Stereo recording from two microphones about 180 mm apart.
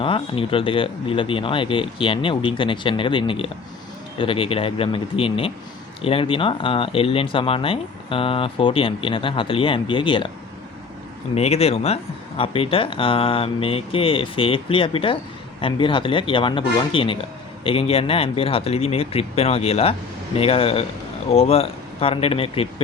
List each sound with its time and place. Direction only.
0.0 s speech: 30° left (ahead or behind)
11.3 s speech: 35° left (ahead or behind)